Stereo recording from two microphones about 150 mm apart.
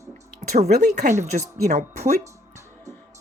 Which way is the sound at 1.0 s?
50° right (ahead or behind).